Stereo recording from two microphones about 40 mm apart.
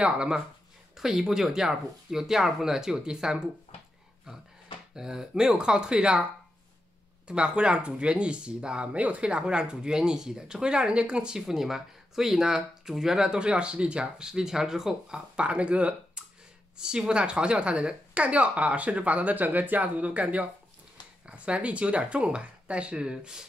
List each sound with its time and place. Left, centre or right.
0.0 s speech: right
0.9 s speech: centre
4.9 s speech: centre
7.2 s speech: right
8.9 s speech: right
11.3 s speech: centre
15.4 s speech: right
16.7 s speech: right